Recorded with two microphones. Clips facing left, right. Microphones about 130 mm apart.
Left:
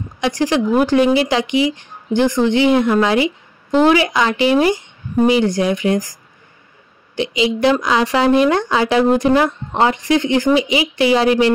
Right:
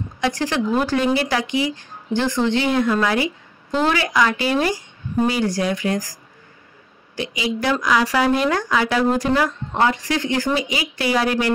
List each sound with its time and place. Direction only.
0.2 s a woman's voice: 15° left (ahead or behind)
7.2 s a woman's voice: 20° left (ahead or behind)